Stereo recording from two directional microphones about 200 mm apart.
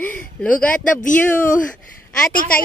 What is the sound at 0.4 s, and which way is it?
Speech, 5° left (ahead or behind).